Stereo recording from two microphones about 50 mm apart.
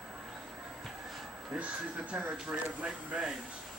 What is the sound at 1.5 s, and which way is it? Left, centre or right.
Speech, right.